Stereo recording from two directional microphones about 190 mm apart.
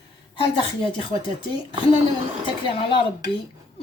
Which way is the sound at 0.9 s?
30° left (ahead or behind).